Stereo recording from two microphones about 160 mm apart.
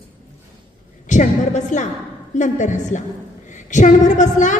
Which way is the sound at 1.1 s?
50° left (ahead or behind).